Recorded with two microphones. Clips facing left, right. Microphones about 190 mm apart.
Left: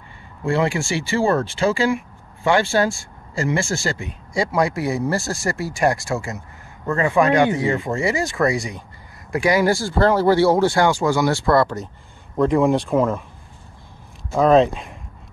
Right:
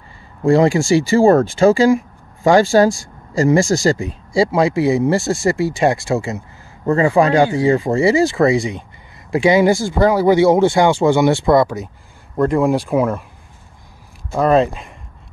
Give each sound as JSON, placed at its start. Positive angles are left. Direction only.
{"t": 0.4, "sound": "speech", "side_deg": -40}
{"t": 12.4, "sound": "speech", "side_deg": 0}
{"t": 14.3, "sound": "speech", "side_deg": -5}